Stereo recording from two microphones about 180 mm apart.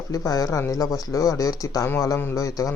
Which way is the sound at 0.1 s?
20° left (ahead or behind).